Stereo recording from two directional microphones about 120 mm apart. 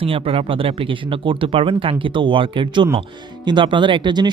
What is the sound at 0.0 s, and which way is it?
Speech, 50° right (ahead or behind).